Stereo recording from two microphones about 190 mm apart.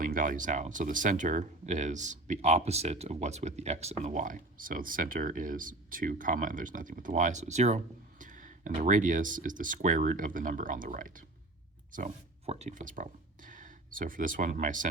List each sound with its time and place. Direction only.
0.0 s speech: 45° right (ahead or behind)